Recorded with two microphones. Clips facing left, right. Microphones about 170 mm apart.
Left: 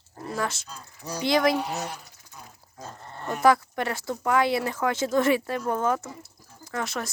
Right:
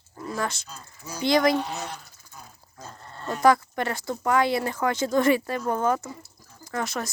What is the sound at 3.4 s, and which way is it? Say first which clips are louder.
Speech: right 1 dB; 5° left (ahead or behind).